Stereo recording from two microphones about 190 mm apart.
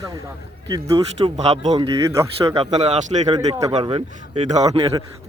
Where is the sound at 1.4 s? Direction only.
35° right (ahead or behind).